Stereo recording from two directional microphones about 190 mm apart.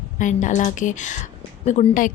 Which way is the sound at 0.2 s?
40° left (ahead or behind).